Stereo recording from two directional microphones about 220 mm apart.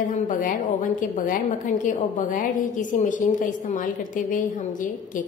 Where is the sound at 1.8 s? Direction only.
35° left (ahead or behind).